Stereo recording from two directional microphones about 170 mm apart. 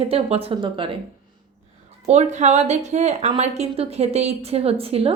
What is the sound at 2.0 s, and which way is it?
A woman's voice, 40° right (ahead or behind).